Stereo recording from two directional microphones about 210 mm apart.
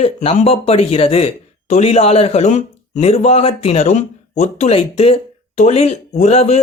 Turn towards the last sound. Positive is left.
turn(degrees=30)  # may be behind; listen again after turning